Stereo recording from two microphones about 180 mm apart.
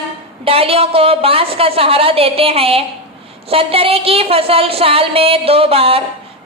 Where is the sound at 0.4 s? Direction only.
30° right (ahead or behind).